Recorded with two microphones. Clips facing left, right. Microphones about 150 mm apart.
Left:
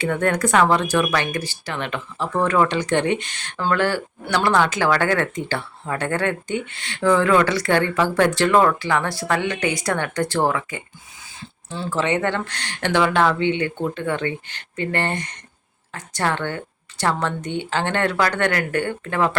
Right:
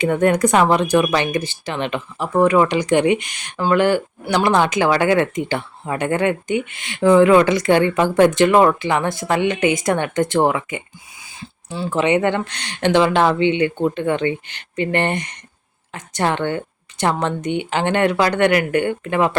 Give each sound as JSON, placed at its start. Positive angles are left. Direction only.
{"t": 0.0, "sound": "speech", "side_deg": -20}